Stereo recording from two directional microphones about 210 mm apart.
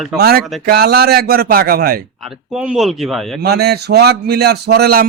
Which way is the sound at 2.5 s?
5° right (ahead or behind).